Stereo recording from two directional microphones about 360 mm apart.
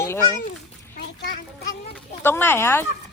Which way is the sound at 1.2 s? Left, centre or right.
Left.